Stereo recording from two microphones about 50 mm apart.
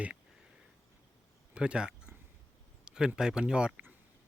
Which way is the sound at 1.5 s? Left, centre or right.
Centre.